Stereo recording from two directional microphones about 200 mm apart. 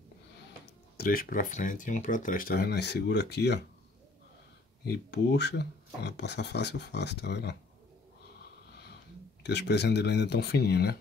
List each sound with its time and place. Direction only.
0.9 s speech: 45° left (ahead or behind)
4.8 s speech: 60° left (ahead or behind)
9.4 s speech: 60° left (ahead or behind)